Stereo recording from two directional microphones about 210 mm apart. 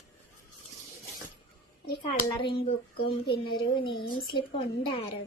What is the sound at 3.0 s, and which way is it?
Speech, 25° left (ahead or behind).